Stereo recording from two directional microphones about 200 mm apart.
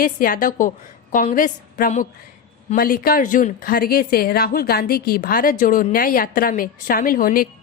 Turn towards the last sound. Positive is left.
turn(degrees=45)  # may be behind; listen again after turning